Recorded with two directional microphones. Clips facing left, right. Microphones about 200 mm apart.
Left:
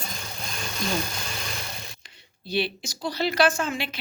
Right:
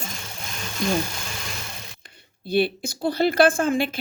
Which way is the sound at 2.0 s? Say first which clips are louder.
Right 4 dB; 55° right (ahead or behind).